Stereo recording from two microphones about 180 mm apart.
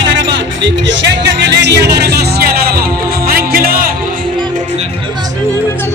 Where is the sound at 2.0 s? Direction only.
60° right (ahead or behind).